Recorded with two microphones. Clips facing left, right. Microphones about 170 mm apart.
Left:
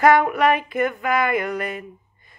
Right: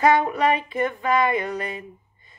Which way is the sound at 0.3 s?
30° right (ahead or behind).